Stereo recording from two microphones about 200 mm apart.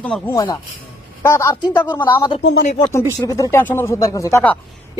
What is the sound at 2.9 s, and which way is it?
Speech, 15° left (ahead or behind).